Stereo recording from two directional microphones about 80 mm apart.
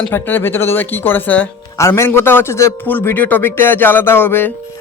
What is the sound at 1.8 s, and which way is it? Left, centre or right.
A man's voice, left.